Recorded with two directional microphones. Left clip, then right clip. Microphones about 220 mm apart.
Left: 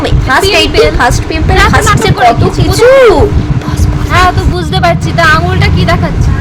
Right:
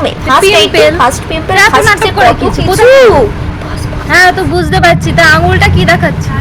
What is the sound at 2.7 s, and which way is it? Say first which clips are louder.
Speech: right 1 dB; 15° left (ahead or behind).